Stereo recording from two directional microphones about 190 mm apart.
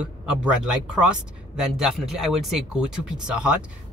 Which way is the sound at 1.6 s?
Centre (ahead or behind).